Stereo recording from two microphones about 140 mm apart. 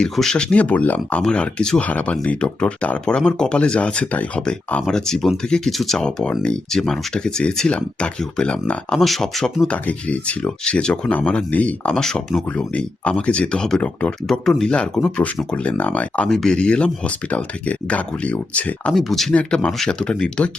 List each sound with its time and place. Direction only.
0.0 s speech: 5° left (ahead or behind)